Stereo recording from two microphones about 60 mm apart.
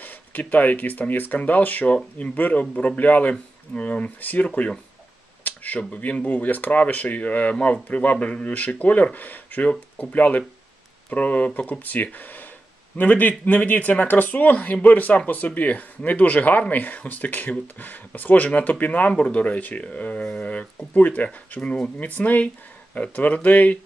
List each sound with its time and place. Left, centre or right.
0.0 s speech: left
4.5 s speech: centre